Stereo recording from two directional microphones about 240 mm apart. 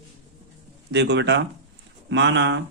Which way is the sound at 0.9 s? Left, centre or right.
Right.